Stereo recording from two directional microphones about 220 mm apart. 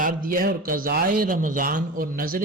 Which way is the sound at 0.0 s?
40° right (ahead or behind).